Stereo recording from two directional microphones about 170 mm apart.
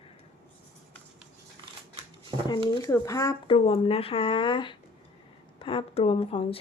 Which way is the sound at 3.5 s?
35° left (ahead or behind).